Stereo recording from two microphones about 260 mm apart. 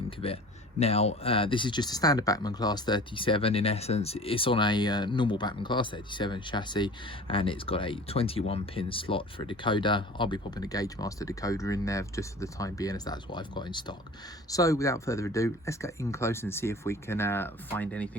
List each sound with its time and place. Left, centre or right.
0.2 s a man's voice: left; by 18.1 s centre